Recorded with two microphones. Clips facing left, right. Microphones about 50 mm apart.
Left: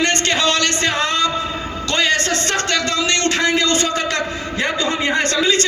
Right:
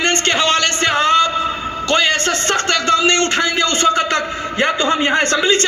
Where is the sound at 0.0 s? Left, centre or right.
Right.